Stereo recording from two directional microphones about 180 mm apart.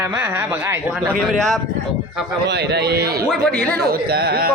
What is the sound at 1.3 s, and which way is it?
Speech, centre (ahead or behind).